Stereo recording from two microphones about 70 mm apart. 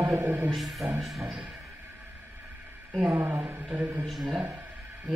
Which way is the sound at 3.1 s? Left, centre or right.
Right.